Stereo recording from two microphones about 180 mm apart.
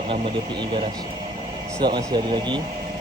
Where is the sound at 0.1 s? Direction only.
25° right (ahead or behind).